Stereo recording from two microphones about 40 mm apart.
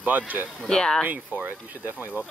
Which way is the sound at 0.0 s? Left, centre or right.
Right.